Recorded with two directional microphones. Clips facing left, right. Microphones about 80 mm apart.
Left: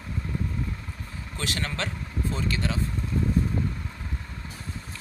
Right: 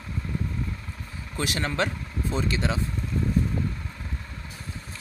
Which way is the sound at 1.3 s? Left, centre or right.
Centre.